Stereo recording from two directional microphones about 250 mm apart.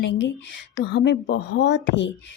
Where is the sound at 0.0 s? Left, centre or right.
Left.